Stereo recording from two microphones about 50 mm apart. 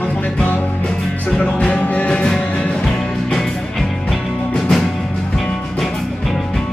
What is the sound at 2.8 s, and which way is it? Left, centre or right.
Music, centre.